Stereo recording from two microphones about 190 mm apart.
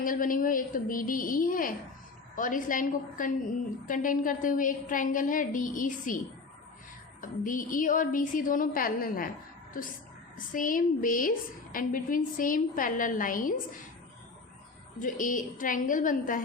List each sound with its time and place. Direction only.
0.0 s a woman's voice: 45° left (ahead or behind)
7.2 s a woman's voice: 45° left (ahead or behind)
10.3 s a woman's voice: 45° left (ahead or behind)
14.9 s a woman's voice: 45° left (ahead or behind)